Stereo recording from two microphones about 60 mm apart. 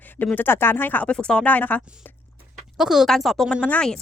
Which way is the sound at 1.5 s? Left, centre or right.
Left.